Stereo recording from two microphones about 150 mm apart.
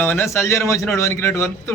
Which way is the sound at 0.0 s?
15° left (ahead or behind).